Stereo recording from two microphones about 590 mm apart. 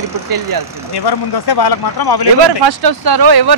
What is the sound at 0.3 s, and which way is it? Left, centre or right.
Speech, right.